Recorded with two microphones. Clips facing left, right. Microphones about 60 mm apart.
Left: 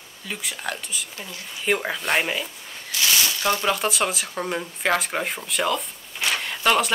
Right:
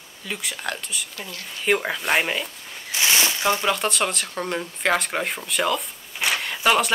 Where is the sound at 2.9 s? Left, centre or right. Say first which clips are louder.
Right 2 dB; right.